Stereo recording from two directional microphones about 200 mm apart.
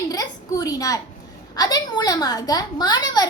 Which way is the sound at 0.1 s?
20° left (ahead or behind).